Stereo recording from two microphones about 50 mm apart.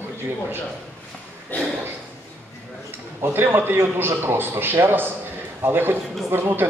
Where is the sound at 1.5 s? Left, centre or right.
Left.